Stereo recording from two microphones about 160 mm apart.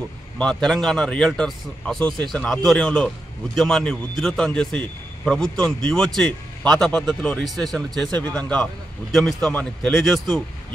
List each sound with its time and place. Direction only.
0.4 s a man's voice: 5° left (ahead or behind)
2.0 s speech: 30° right (ahead or behind)
2.3 s a man's voice: 5° left (ahead or behind)